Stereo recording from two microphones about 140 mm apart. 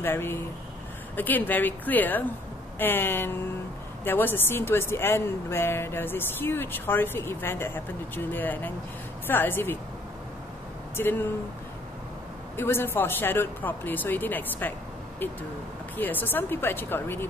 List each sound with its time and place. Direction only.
0.0 s a woman's voice: 15° left (ahead or behind)
11.0 s a woman's voice: 15° left (ahead or behind)
12.5 s a woman's voice: 15° left (ahead or behind)
16.0 s a woman's voice: 15° left (ahead or behind)